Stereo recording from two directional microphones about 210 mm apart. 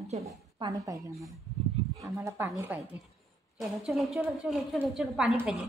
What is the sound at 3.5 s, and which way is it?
A woman's voice, centre (ahead or behind).